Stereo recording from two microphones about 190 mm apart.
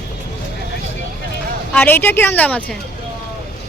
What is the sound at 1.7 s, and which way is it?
Speech, 10° left (ahead or behind).